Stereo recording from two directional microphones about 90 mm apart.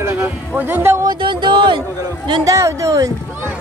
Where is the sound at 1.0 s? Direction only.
65° right (ahead or behind).